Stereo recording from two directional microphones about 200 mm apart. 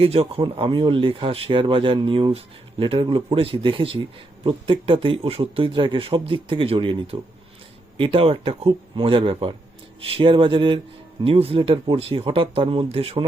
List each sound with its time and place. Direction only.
0.0 s speech: 30° right (ahead or behind)